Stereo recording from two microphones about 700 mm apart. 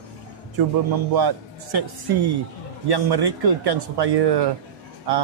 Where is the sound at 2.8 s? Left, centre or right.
Right.